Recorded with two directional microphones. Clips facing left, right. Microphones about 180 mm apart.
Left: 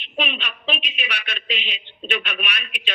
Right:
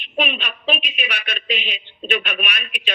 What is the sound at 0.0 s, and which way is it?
A woman's voice, 45° right (ahead or behind).